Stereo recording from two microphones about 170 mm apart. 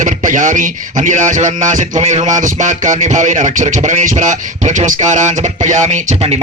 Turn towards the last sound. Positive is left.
turn(degrees=-40)  # may be behind; listen again after turning